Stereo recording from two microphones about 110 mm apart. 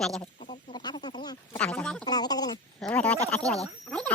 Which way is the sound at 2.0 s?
40° left (ahead or behind).